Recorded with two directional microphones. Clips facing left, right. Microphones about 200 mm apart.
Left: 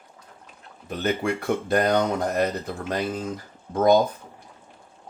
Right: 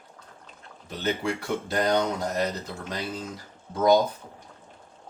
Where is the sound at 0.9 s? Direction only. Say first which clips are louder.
Left 3 dB; 55° left (ahead or behind).